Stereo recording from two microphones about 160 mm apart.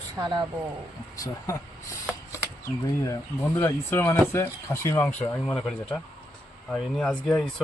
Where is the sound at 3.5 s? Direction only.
15° left (ahead or behind).